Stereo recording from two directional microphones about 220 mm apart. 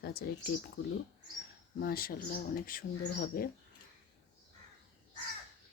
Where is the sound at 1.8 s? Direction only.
40° left (ahead or behind).